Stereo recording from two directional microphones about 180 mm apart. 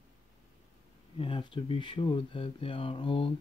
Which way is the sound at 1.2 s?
30° left (ahead or behind).